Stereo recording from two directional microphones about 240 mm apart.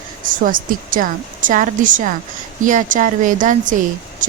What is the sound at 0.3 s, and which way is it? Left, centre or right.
Speech, right.